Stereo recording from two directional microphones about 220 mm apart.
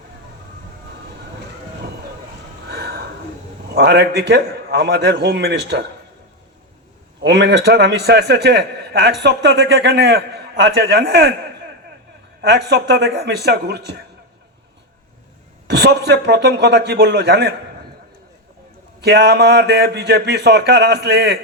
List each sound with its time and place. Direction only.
2.6 s a sound: 50° right (ahead or behind)
3.8 s a man's voice: 50° right (ahead or behind)
7.2 s a man's voice: 50° right (ahead or behind)
12.4 s a man's voice: 50° right (ahead or behind)
15.6 s a man's voice: 50° right (ahead or behind)
19.0 s a man's voice: 50° right (ahead or behind)